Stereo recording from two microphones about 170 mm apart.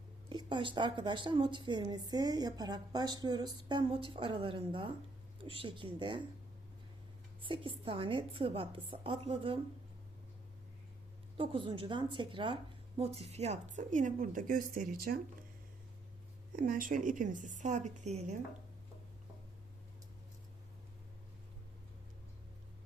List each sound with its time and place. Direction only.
0.3 s a woman's voice: 25° right (ahead or behind)
7.4 s a woman's voice: 30° right (ahead or behind)
11.3 s a woman's voice: 30° right (ahead or behind); by 15.2 s 60° right (ahead or behind)
16.5 s a woman's voice: 55° right (ahead or behind)